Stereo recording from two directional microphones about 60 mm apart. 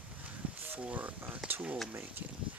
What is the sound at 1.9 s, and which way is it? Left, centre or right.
Speech, right.